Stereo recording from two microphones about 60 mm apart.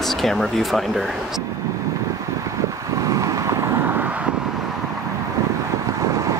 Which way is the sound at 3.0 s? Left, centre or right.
Right.